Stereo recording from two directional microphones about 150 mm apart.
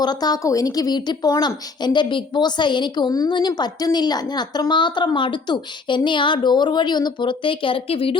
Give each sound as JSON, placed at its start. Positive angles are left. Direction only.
{"t": 0.0, "sound": "a woman's voice", "side_deg": 25}